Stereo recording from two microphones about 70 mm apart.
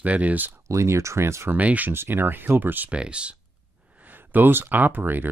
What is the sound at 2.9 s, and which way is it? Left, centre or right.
Speech, centre.